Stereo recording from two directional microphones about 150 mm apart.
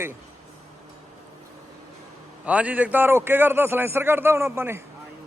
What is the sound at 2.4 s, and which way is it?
A man's voice, 10° right (ahead or behind).